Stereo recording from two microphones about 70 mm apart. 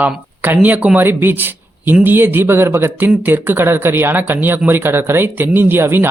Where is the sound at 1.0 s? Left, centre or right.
Right.